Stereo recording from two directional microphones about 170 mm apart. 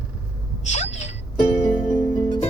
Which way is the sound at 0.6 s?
40° left (ahead or behind).